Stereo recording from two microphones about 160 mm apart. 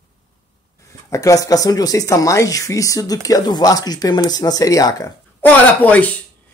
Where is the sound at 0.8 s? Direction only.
20° left (ahead or behind).